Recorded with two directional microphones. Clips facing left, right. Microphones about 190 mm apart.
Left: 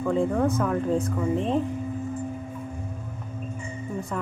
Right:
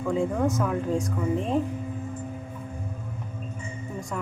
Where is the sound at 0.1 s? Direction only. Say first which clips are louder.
Left 1 dB; centre (ahead or behind).